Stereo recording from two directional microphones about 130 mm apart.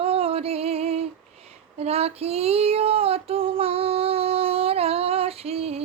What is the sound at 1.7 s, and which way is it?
Female singing, 50° right (ahead or behind).